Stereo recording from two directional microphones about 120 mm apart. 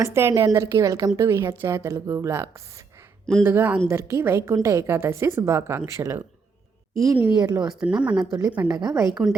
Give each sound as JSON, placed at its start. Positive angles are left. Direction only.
{"t": 0.0, "sound": "a woman's voice", "side_deg": -20}
{"t": 7.3, "sound": "speech", "side_deg": -35}
{"t": 7.7, "sound": "speech", "side_deg": -5}
{"t": 8.6, "sound": "speech", "side_deg": -30}
{"t": 9.0, "sound": "a woman's voice", "side_deg": -5}